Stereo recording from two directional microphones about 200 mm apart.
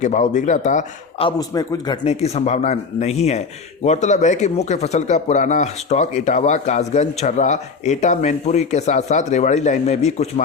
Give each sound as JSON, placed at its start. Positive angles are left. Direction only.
{"t": 0.0, "sound": "speech", "side_deg": 35}
{"t": 1.4, "sound": "a man's voice", "side_deg": 20}
{"t": 2.0, "sound": "speech", "side_deg": 35}